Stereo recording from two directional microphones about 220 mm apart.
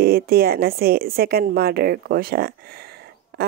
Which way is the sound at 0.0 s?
45° right (ahead or behind).